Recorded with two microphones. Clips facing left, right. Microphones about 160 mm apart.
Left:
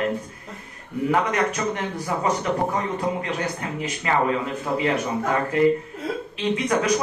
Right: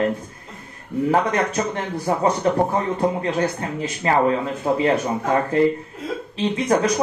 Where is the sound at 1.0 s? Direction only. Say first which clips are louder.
Right 2 dB; 35° right (ahead or behind).